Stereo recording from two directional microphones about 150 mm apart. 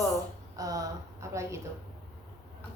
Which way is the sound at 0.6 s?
20° right (ahead or behind).